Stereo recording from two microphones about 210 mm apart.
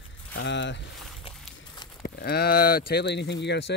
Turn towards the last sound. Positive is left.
turn(degrees=55)  # may be behind; listen again after turning